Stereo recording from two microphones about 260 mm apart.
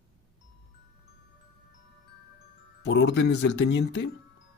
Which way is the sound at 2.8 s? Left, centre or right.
Left.